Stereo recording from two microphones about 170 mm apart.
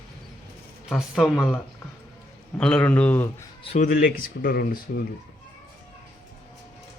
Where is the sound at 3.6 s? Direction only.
45° left (ahead or behind); by 5.0 s 65° left (ahead or behind).